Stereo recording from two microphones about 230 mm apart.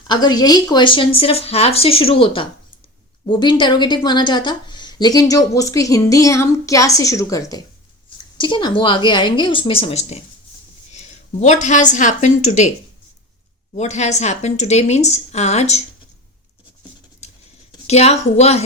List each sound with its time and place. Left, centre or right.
0.1 s a woman's voice: centre
13.7 s speech: left
17.7 s speech: left